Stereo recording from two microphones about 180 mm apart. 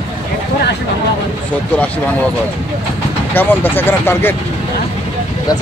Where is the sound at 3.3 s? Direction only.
10° left (ahead or behind).